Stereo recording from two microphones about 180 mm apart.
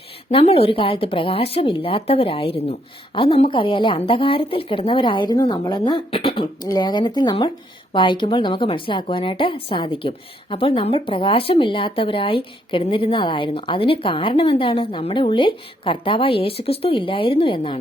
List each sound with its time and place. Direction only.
0.3 s a woman's voice: 30° left (ahead or behind)